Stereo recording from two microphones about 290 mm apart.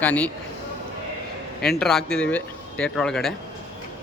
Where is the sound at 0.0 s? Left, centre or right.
Centre.